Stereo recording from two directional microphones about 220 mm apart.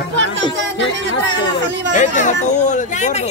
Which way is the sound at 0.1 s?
55° right (ahead or behind).